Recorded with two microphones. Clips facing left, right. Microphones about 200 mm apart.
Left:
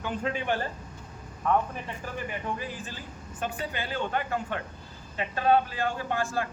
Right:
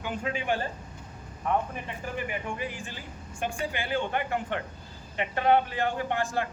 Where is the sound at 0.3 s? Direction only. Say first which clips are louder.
Right 2 dB; 15° right (ahead or behind).